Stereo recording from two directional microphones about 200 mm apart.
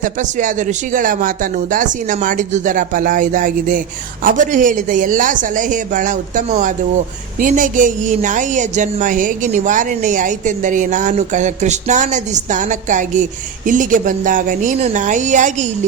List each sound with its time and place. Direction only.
0.0 s a woman's voice: 40° right (ahead or behind)